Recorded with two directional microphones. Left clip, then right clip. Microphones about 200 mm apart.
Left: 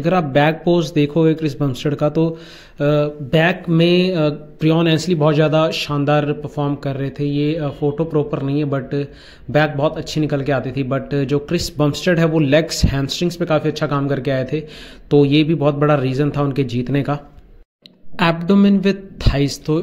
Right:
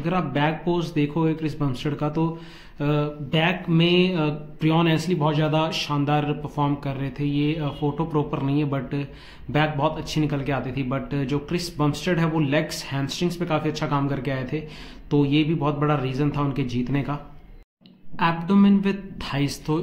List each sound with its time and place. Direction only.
0.0 s speech: 30° left (ahead or behind)